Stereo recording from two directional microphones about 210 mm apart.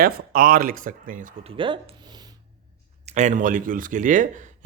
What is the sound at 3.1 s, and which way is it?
Speech, 35° right (ahead or behind).